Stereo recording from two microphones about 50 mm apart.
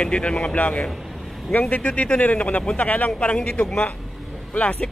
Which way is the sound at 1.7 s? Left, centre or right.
Left.